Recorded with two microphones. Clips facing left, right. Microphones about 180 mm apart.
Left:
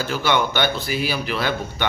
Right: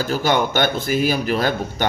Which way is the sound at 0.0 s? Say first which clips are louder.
Right 2 dB; 40° right (ahead or behind).